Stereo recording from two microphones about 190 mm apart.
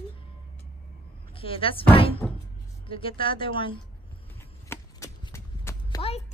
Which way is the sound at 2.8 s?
30° left (ahead or behind).